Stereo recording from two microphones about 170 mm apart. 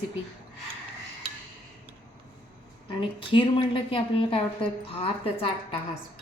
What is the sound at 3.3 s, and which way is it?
A woman's voice, 30° left (ahead or behind).